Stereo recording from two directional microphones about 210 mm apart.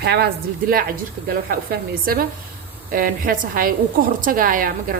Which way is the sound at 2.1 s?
45° right (ahead or behind).